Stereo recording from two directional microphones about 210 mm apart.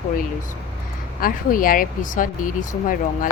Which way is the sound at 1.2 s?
40° left (ahead or behind).